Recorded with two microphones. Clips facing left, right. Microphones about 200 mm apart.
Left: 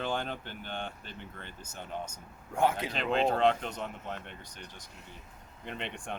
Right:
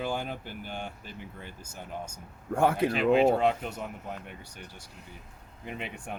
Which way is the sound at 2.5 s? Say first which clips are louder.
Right 4 dB; 60° right (ahead or behind).